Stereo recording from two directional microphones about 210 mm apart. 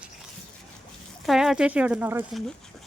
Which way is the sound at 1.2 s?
Centre (ahead or behind).